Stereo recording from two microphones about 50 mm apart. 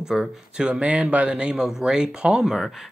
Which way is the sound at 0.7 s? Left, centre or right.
Right.